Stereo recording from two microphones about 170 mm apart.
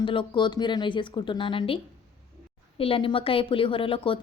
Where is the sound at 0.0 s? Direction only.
30° left (ahead or behind).